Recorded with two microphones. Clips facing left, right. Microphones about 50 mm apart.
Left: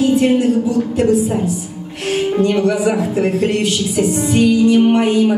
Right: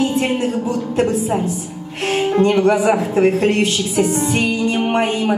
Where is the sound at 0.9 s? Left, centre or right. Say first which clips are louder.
Left 1 dB; right.